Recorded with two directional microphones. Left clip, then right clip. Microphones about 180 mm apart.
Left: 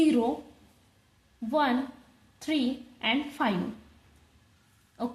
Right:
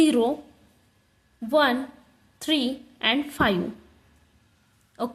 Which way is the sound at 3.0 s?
35° right (ahead or behind).